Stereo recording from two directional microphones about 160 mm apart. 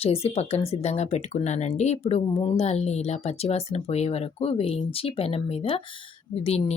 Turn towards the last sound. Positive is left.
turn(degrees=40)  # may be behind; listen again after turning